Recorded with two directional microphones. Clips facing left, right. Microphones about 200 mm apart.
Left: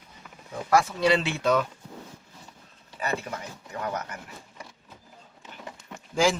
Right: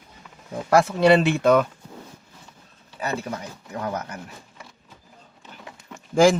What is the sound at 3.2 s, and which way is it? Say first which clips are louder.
Speech: right 4 dB; 35° right (ahead or behind).